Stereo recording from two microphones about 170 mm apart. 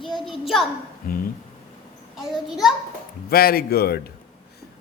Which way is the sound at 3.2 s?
65° left (ahead or behind).